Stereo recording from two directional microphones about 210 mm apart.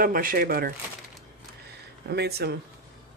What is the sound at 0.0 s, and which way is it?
Speech, 40° right (ahead or behind).